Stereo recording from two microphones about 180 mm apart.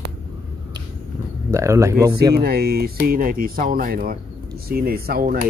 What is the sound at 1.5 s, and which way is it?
Speech, 15° right (ahead or behind).